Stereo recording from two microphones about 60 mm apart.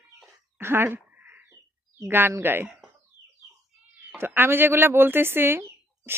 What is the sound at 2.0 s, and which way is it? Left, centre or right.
Speech, right.